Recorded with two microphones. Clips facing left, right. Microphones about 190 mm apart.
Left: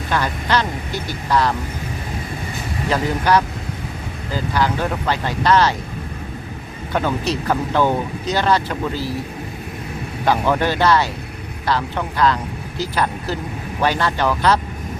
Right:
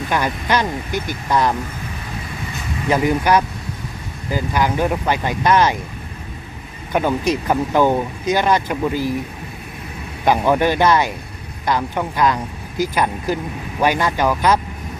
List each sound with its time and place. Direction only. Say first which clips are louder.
0.1 s speech: even; 15° right (ahead or behind)
2.9 s speech: right 2 dB; 15° right (ahead or behind)
6.9 s speech: right 3 dB; 15° right (ahead or behind)
10.2 s speech: right 2 dB; 15° right (ahead or behind)